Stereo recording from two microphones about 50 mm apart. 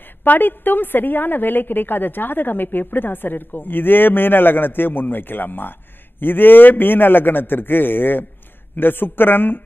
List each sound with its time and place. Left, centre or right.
0.2 s a woman's voice: left